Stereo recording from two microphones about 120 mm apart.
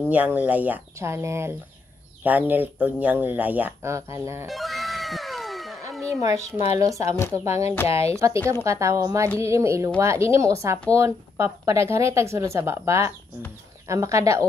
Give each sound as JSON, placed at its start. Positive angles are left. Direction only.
{"t": 0.1, "sound": "speech", "side_deg": -15}
{"t": 3.9, "sound": "a woman's voice", "side_deg": -25}
{"t": 4.5, "sound": "music", "side_deg": 0}
{"t": 6.0, "sound": "a sound", "side_deg": -25}
{"t": 6.6, "sound": "speech", "side_deg": 60}
{"t": 6.9, "sound": "a woman's voice", "side_deg": -25}